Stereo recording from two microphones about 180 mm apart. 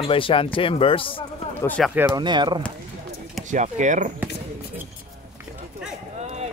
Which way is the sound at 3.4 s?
40° right (ahead or behind).